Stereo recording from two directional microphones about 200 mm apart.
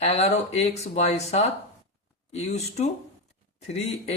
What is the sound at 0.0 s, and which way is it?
Speech, 30° left (ahead or behind).